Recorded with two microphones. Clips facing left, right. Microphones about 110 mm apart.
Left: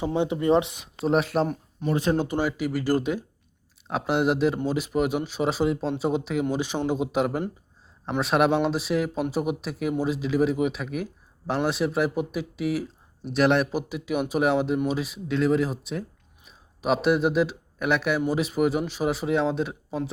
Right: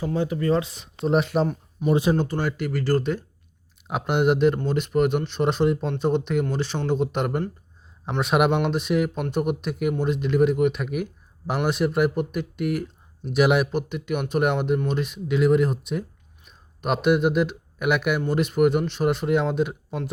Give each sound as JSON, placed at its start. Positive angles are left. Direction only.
{"t": 0.0, "sound": "speech", "side_deg": 20}
{"t": 1.0, "sound": "a man's voice", "side_deg": 0}
{"t": 1.9, "sound": "speech", "side_deg": -15}
{"t": 2.1, "sound": "speech", "side_deg": 10}
{"t": 3.8, "sound": "a man's voice", "side_deg": 0}